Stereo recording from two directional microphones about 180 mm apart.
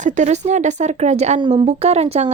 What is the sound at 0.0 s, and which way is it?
A woman's voice, 40° right (ahead or behind).